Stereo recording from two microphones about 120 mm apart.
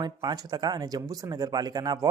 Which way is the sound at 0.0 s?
35° right (ahead or behind).